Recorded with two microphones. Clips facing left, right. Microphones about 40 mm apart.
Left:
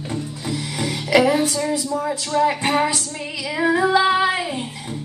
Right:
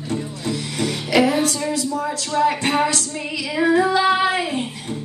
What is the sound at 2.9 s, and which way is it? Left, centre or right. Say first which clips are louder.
Female singing: right 1 dB; centre.